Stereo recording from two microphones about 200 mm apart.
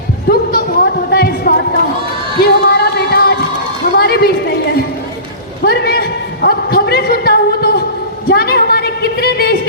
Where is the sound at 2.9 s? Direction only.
55° left (ahead or behind).